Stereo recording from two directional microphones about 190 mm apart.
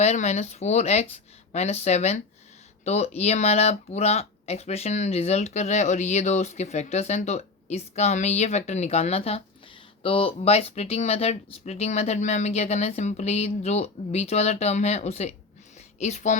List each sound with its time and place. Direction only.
0.0 s speech: 35° left (ahead or behind)